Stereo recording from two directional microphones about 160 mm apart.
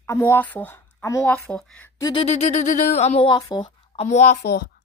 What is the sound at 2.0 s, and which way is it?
Speech, 30° left (ahead or behind).